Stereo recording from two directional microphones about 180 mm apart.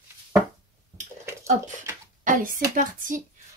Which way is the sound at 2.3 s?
50° right (ahead or behind).